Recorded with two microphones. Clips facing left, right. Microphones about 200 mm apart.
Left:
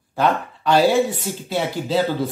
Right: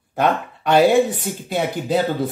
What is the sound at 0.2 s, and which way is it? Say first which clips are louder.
Speech: even; 20° right (ahead or behind).